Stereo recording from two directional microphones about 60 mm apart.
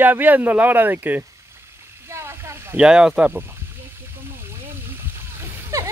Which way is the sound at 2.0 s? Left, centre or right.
Right.